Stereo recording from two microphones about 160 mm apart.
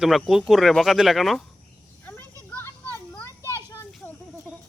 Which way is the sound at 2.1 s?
10° left (ahead or behind).